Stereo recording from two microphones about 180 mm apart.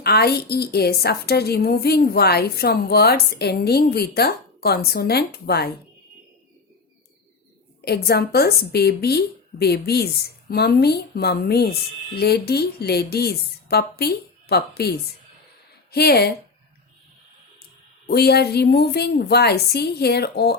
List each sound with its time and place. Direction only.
0.0 s speech: 65° left (ahead or behind)
7.9 s speech: 60° left (ahead or behind)
18.0 s speech: 65° left (ahead or behind)